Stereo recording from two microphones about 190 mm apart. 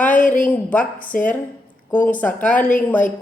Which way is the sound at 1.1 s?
50° left (ahead or behind).